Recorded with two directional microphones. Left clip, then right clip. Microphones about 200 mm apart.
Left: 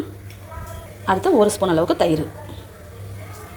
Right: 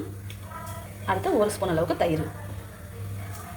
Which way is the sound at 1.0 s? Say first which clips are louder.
Left 8 dB; 30° left (ahead or behind).